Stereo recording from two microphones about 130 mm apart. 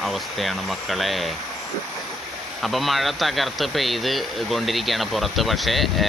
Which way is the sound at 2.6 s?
Centre (ahead or behind).